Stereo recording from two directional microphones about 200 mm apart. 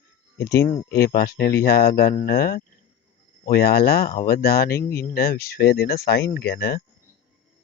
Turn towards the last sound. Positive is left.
turn(degrees=50)  # may be behind; listen again after turning